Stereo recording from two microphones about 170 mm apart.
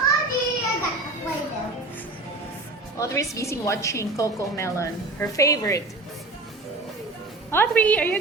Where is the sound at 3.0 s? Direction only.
20° left (ahead or behind).